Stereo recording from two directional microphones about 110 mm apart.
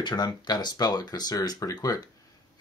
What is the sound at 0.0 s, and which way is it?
Speech, 40° left (ahead or behind).